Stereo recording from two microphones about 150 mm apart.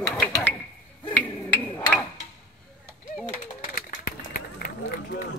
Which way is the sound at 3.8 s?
70° left (ahead or behind).